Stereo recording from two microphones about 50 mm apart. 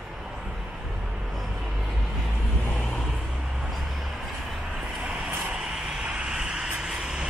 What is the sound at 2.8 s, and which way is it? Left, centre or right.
Vehicle, centre.